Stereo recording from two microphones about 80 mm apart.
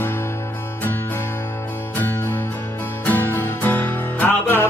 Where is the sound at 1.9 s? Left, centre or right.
Left.